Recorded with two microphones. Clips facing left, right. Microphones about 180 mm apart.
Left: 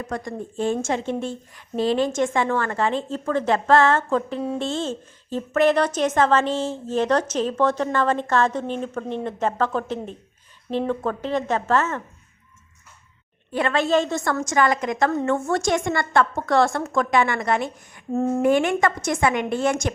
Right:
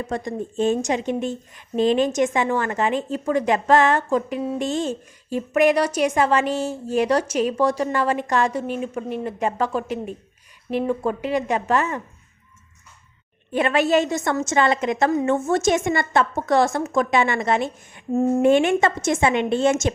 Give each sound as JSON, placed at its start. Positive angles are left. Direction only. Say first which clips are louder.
{"t": 0.0, "sound": "a woman's voice", "louder": "right 3 dB", "side_deg": -25}
{"t": 13.5, "sound": "a woman's voice", "louder": "right 2 dB", "side_deg": -20}